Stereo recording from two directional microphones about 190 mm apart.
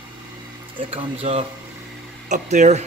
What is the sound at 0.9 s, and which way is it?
Speech, 30° right (ahead or behind).